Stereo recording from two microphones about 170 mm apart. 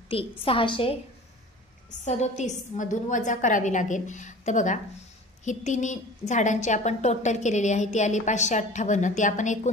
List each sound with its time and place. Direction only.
0.4 s a woman's voice: 30° left (ahead or behind)
2.0 s a woman's voice: 45° left (ahead or behind)